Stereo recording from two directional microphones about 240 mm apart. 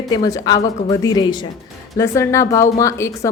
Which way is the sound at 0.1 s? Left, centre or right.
Centre.